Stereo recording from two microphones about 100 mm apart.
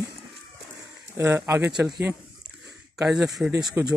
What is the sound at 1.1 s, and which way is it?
Speech, 25° right (ahead or behind).